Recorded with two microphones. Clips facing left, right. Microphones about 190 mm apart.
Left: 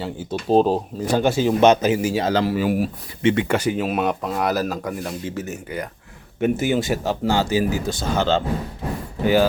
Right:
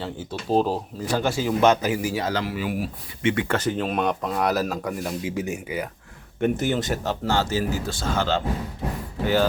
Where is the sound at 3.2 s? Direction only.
25° left (ahead or behind).